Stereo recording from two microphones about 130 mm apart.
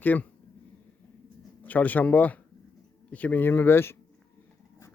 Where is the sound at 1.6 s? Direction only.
15° left (ahead or behind).